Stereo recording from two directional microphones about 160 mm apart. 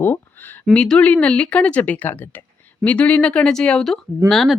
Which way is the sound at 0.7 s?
5° left (ahead or behind).